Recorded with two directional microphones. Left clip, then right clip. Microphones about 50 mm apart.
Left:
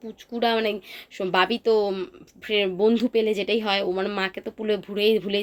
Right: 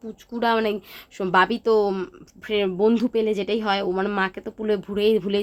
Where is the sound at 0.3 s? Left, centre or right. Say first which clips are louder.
Right 1 dB; right.